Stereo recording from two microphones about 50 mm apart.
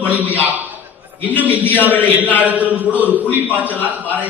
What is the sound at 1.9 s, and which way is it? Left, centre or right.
Speech, left.